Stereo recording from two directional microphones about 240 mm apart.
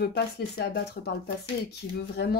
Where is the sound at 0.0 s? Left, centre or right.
Left.